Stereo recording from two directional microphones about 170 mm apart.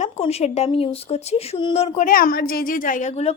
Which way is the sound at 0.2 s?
40° left (ahead or behind).